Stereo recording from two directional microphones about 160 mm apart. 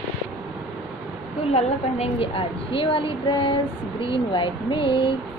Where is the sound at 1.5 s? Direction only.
40° left (ahead or behind).